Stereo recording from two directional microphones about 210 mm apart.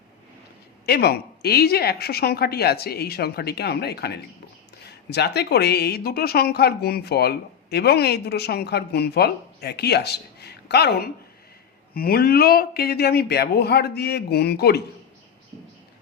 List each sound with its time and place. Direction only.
0.9 s speech: 50° left (ahead or behind)